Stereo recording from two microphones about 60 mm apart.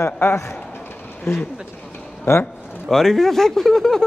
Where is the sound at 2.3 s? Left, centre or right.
Left.